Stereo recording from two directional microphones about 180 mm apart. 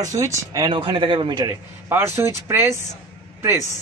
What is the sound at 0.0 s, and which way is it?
Speech, 20° right (ahead or behind).